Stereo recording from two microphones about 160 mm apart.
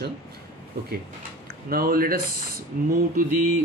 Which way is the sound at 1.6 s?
65° right (ahead or behind).